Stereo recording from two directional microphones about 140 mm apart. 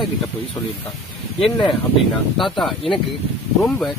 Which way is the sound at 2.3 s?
Centre (ahead or behind).